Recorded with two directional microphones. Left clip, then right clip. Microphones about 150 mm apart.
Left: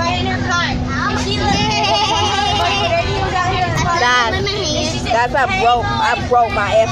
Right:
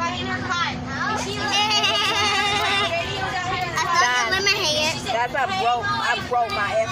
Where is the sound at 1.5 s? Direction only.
50° right (ahead or behind).